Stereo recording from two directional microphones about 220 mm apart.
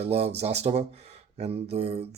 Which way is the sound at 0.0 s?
30° right (ahead or behind).